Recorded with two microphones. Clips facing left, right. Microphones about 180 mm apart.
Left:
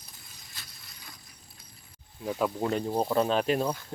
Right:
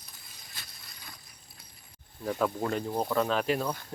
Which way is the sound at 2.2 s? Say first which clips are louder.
Left 1 dB; 15° left (ahead or behind).